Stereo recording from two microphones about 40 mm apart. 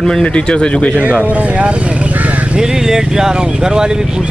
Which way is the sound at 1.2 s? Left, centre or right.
Right.